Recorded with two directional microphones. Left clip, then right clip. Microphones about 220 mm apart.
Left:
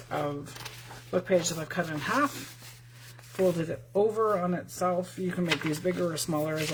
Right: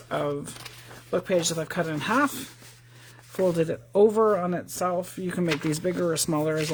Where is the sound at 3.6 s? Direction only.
50° right (ahead or behind).